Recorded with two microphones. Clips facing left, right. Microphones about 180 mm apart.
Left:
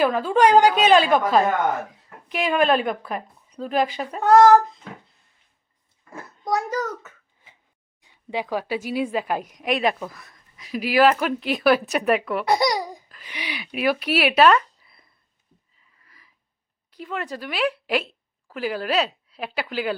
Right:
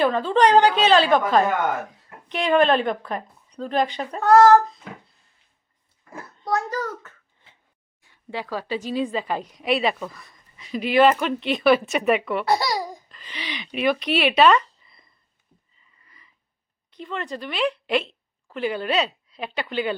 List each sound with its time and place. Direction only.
0.0 s speech: 10° left (ahead or behind)
4.2 s speech: 15° left (ahead or behind)
6.4 s a sound: 15° left (ahead or behind)
8.0 s a woman's voice: 15° left (ahead or behind); by 12.5 s centre (ahead or behind)
12.5 s speech: 15° left (ahead or behind)
16.0 s a sound: 5° left (ahead or behind)
16.9 s a woman's voice: 5° left (ahead or behind)